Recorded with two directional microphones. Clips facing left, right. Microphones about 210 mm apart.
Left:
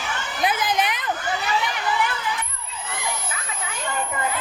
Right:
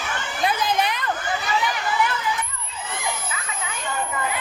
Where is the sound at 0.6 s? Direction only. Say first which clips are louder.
Right 1 dB; 20° left (ahead or behind).